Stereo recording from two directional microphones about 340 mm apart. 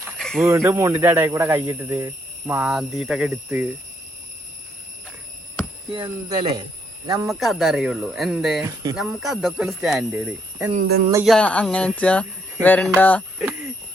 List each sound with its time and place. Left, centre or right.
0.0 s speech: centre
5.9 s speech: centre
7.1 s speech: centre
10.7 s speech: right
11.1 s speech: centre